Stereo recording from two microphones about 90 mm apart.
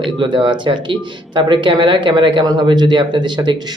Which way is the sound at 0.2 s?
60° right (ahead or behind).